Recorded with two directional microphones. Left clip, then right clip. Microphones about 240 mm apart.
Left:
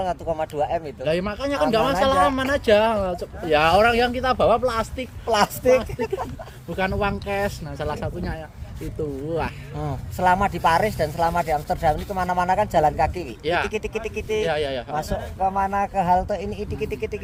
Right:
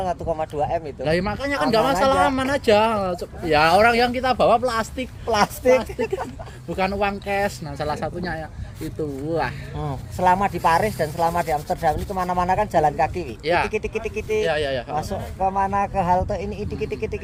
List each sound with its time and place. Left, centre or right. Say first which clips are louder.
0.0 s speech: even; left
1.0 s a man's voice: right 1 dB; centre
5.2 s speech: even; left
6.7 s a man's voice: right 1 dB; centre
9.7 s speech: even; centre
13.4 s a man's voice: right 2 dB; centre
13.7 s speech: right 2 dB; centre
14.4 s a man's voice: right 1 dB; centre
15.4 s speech: right 1 dB; centre